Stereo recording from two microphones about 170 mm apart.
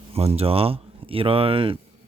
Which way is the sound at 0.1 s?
35° right (ahead or behind).